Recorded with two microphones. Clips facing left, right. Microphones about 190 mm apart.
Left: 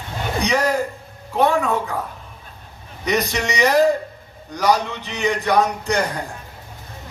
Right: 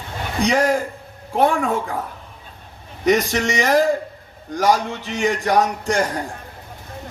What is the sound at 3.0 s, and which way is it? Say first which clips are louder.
A man's voice: right 4 dB; 45° right (ahead or behind).